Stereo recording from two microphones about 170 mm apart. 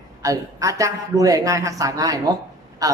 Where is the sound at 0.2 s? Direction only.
20° right (ahead or behind).